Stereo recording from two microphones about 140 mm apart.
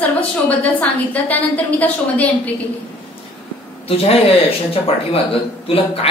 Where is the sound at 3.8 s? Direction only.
45° left (ahead or behind).